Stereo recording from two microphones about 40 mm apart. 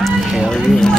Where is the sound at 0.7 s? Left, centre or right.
Centre.